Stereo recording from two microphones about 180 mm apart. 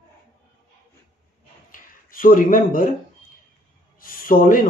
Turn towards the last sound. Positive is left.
turn(degrees=50)  # may be behind; listen again after turning